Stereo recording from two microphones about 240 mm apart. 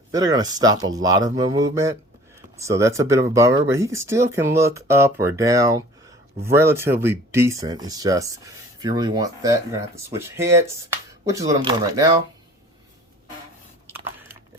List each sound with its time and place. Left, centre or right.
0.1 s speech: centre